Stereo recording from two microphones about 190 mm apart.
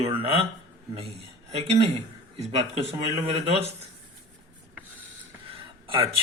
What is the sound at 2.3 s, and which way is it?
Speech, 30° right (ahead or behind).